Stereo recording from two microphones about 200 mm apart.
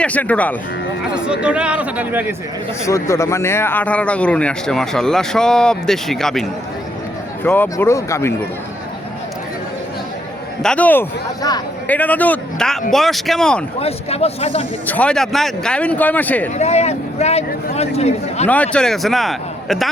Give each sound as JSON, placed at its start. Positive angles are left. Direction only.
{"t": 0.0, "sound": "speech", "side_deg": 5}
{"t": 1.1, "sound": "speech", "side_deg": -5}
{"t": 2.8, "sound": "speech", "side_deg": 15}
{"t": 10.6, "sound": "speech", "side_deg": 5}
{"t": 11.4, "sound": "a man's voice", "side_deg": 20}
{"t": 11.9, "sound": "a man's voice", "side_deg": 10}
{"t": 13.7, "sound": "speech", "side_deg": 30}
{"t": 14.8, "sound": "speech", "side_deg": 5}
{"t": 16.6, "sound": "speech", "side_deg": 35}
{"t": 18.4, "sound": "speech", "side_deg": 5}